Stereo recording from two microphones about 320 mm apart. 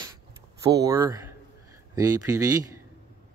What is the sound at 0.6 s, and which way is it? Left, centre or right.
Speech, centre.